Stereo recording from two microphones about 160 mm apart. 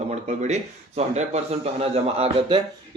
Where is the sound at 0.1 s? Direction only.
45° right (ahead or behind).